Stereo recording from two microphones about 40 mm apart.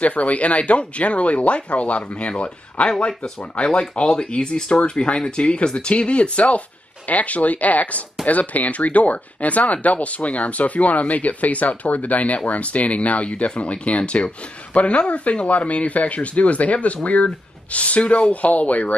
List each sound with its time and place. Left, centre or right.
0.0 s speech: left
2.9 s speech: centre; by 18.9 s left